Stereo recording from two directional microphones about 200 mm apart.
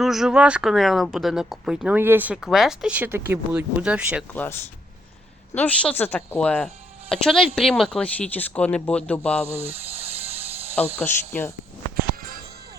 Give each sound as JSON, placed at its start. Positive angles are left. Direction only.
{"t": 0.0, "sound": "speech", "side_deg": 0}
{"t": 4.3, "sound": "speech", "side_deg": 10}
{"t": 5.5, "sound": "speech", "side_deg": 5}
{"t": 9.6, "sound": "a sound", "side_deg": -30}
{"t": 10.9, "sound": "speech", "side_deg": 10}
{"t": 11.9, "sound": "music", "side_deg": -45}